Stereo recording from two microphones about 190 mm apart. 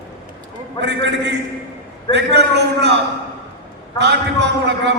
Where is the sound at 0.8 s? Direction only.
65° right (ahead or behind).